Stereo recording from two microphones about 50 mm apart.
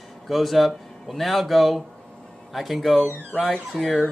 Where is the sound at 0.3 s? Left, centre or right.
Centre.